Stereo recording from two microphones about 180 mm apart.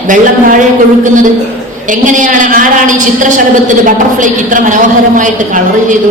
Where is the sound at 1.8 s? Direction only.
45° right (ahead or behind).